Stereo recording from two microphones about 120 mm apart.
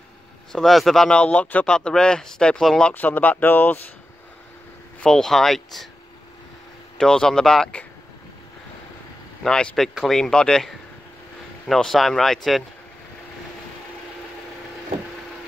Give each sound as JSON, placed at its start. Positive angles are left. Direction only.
{"t": 0.5, "sound": "speech", "side_deg": 5}
{"t": 2.9, "sound": "speech", "side_deg": 15}
{"t": 5.0, "sound": "speech", "side_deg": 5}
{"t": 7.0, "sound": "speech", "side_deg": 5}
{"t": 9.4, "sound": "speech", "side_deg": 5}